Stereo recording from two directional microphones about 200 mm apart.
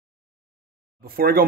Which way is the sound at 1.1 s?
50° right (ahead or behind).